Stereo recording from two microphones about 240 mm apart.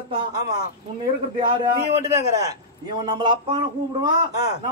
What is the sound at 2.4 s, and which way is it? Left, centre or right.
Speech, centre.